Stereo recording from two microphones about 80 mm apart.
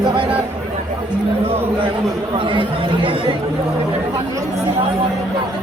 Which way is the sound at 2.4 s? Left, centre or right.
Right.